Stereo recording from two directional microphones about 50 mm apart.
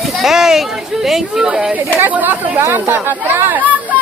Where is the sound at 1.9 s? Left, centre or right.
Right.